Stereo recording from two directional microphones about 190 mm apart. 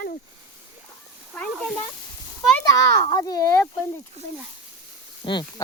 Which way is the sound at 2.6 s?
20° left (ahead or behind).